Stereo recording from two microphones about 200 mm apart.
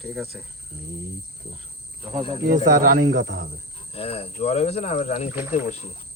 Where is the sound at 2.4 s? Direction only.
45° right (ahead or behind).